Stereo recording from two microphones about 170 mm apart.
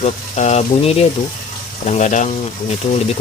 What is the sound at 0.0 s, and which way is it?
Speech, 45° left (ahead or behind).